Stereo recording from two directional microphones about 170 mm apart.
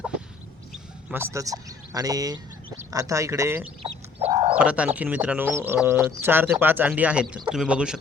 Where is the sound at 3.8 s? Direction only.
30° right (ahead or behind).